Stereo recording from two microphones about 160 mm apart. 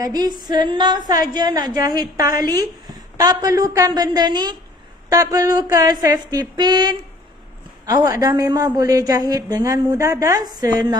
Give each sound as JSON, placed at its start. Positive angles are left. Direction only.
{"t": 0.0, "sound": "a woman's voice", "side_deg": -25}